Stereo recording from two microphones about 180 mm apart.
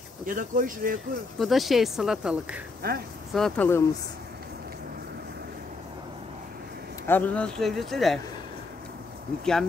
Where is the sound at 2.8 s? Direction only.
60° right (ahead or behind).